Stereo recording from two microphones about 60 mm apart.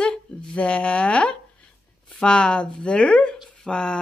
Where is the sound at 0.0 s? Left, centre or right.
Centre.